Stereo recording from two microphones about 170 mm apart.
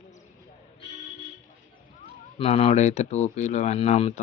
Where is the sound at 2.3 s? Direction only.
35° left (ahead or behind).